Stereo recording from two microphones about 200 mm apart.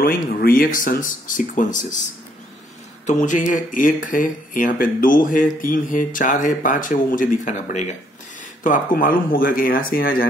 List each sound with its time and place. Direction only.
0.0 s speech: 45° left (ahead or behind)
3.1 s speech: 40° left (ahead or behind)